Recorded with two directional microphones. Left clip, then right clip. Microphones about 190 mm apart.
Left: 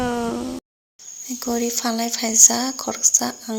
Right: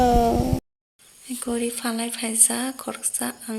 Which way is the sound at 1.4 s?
15° left (ahead or behind).